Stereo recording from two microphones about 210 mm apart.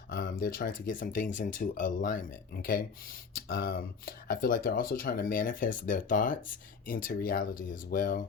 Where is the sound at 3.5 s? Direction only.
45° left (ahead or behind).